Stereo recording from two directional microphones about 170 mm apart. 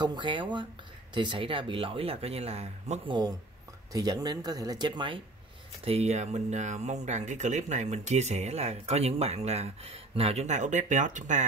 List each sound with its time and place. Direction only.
0.0 s speech: 25° right (ahead or behind)
3.9 s speech: 25° right (ahead or behind)
5.9 s speech: 40° right (ahead or behind)